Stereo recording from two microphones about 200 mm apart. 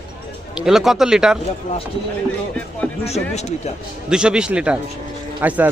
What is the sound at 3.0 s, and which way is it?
Speech, 30° left (ahead or behind).